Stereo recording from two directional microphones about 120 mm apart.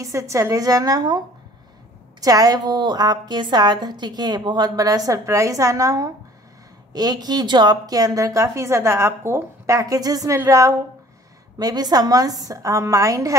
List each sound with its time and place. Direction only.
0.0 s a woman's voice: 25° right (ahead or behind)